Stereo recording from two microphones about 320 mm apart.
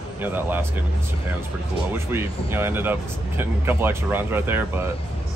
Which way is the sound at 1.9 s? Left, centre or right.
Centre.